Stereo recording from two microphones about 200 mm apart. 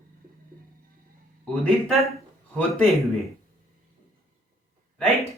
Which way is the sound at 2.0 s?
Centre (ahead or behind).